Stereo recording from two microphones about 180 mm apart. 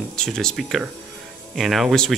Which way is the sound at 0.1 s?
5° left (ahead or behind).